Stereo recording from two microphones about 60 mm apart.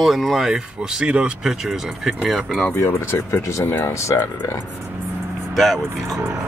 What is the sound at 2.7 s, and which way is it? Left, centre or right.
Speech, left.